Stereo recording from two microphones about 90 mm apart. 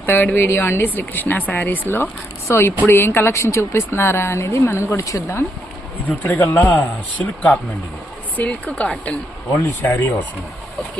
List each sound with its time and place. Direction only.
0.0 s speech: 20° left (ahead or behind)
6.3 s speech: 20° left (ahead or behind)
8.4 s speech: 15° left (ahead or behind)
9.6 s speech: 25° left (ahead or behind)